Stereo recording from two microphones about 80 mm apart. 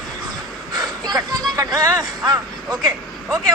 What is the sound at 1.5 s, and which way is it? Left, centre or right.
Speech, right.